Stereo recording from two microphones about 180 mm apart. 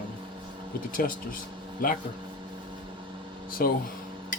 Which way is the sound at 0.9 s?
50° left (ahead or behind).